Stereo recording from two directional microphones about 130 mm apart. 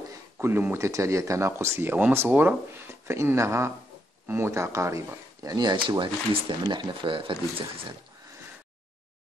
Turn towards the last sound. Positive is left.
turn(degrees=-40)  # may be behind; listen again after turning